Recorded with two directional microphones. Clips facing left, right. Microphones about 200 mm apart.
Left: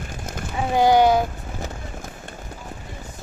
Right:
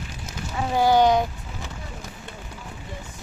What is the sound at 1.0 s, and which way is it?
Vehicle, 5° left (ahead or behind).